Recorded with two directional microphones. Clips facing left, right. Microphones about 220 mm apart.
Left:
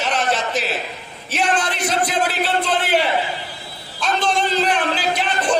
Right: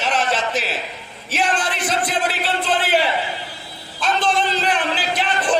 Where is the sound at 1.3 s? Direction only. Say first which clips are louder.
Left 1 dB; 5° right (ahead or behind).